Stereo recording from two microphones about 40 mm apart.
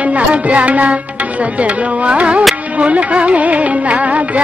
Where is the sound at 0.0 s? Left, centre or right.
Right.